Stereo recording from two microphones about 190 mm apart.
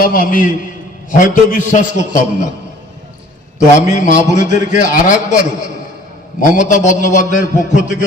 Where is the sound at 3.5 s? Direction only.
40° left (ahead or behind).